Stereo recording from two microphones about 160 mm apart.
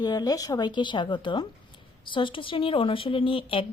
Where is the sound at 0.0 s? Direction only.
25° left (ahead or behind).